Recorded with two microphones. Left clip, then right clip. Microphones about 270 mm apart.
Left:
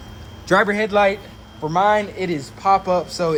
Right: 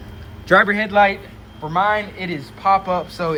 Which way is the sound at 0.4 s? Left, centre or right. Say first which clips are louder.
Right 2 dB; centre.